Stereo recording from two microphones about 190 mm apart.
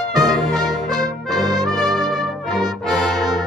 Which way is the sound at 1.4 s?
20° right (ahead or behind).